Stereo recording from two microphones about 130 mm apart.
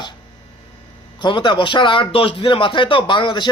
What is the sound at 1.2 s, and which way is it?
A man's voice, 40° left (ahead or behind).